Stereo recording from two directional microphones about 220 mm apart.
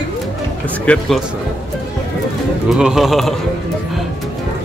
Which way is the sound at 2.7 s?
Centre (ahead or behind).